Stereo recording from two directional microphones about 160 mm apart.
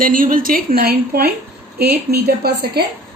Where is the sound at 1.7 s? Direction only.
80° right.